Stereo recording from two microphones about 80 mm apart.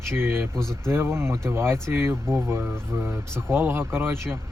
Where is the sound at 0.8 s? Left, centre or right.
Right.